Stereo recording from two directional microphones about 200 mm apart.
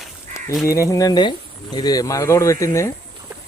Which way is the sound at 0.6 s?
15° left (ahead or behind).